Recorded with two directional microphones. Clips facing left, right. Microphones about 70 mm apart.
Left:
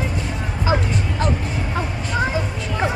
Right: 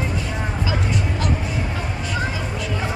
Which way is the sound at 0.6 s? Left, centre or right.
Left.